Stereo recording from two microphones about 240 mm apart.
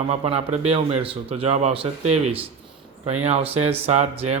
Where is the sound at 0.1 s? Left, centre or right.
Right.